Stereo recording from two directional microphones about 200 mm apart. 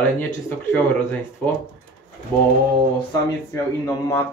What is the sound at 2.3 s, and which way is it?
Speech, 10° left (ahead or behind).